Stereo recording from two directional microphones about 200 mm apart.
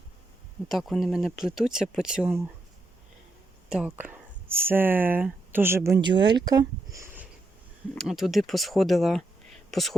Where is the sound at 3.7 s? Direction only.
5° right (ahead or behind).